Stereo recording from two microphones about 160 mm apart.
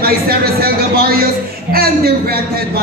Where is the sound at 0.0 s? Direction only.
70° right (ahead or behind).